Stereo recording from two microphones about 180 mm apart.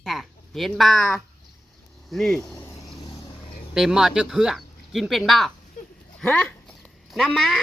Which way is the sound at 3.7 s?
5° right (ahead or behind).